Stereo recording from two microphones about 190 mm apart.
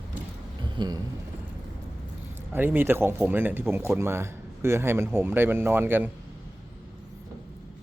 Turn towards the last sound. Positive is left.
turn(degrees=-10)  # may be behind; listen again after turning